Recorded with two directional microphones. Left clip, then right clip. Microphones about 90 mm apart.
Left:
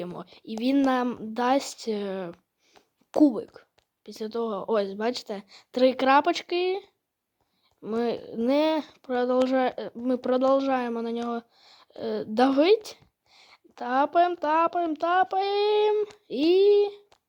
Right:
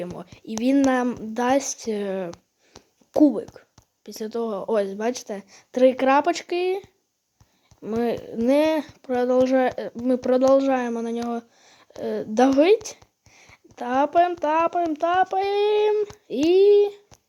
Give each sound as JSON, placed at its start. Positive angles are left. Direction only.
{"t": 0.4, "sound": "speech", "side_deg": 10}
{"t": 3.2, "sound": "speech", "side_deg": 20}